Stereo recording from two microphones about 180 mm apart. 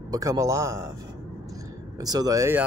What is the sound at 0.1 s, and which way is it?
Speech, 20° right (ahead or behind).